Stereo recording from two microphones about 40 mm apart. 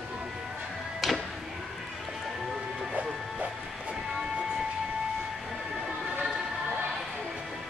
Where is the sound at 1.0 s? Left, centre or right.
Centre.